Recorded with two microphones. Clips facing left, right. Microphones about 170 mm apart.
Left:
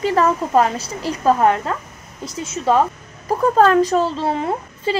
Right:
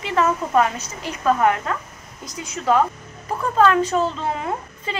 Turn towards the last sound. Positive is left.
turn(degrees=30)  # may be behind; listen again after turning